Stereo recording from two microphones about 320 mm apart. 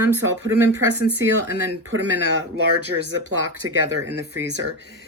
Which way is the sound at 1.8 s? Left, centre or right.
Right.